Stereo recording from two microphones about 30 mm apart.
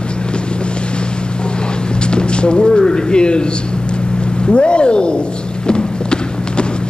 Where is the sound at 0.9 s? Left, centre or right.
Left.